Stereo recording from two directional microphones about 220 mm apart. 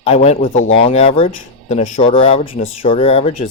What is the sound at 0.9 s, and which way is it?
Speech, 25° left (ahead or behind).